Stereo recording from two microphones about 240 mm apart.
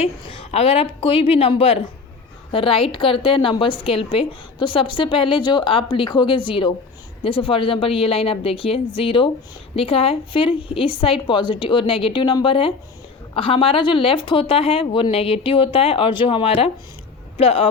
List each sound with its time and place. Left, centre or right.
0.0 s a woman's voice: left